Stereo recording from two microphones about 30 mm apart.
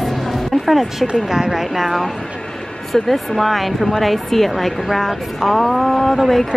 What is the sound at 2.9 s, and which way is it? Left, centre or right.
Speech, centre.